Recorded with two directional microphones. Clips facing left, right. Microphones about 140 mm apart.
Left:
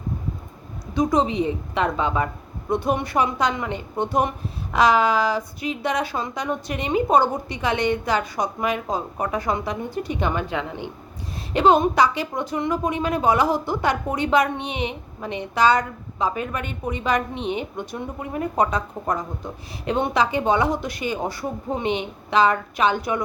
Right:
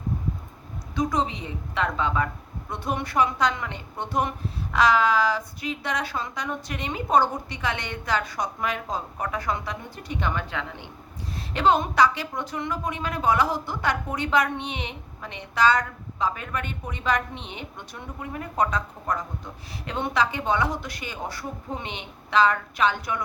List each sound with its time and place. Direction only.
0.9 s a woman's voice: 20° left (ahead or behind)